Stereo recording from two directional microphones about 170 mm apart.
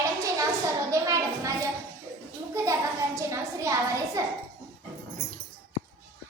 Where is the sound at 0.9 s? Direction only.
20° right (ahead or behind).